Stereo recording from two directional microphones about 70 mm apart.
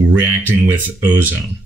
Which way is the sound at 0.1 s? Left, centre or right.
Right.